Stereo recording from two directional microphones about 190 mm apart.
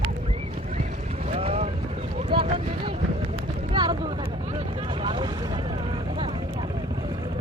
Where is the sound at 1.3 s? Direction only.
30° right (ahead or behind).